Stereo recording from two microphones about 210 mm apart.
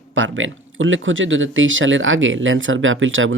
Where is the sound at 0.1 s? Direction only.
65° right (ahead or behind).